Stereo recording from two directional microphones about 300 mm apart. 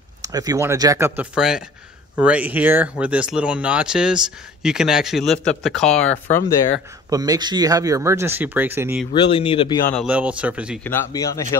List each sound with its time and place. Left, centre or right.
0.2 s speech: centre
7.1 s speech: centre
9.3 s speech: centre
9.9 s speech: centre